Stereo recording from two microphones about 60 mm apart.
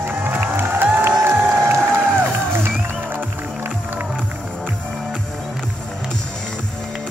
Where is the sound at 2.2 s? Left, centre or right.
Right.